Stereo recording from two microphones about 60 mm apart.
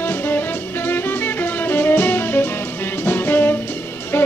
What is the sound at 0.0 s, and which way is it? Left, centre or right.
Music, left.